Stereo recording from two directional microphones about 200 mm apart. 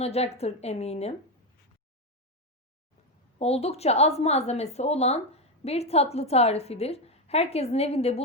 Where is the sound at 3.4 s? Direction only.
30° left (ahead or behind).